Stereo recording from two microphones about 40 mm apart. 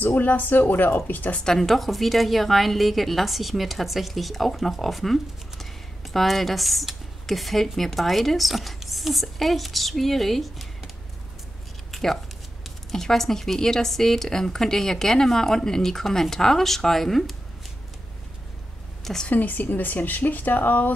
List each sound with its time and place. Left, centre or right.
0.0 s speech: left
1.4 s speech: centre
1.7 s speech: centre
11.9 s a sound: centre
12.9 s speech: centre
19.3 s speech: left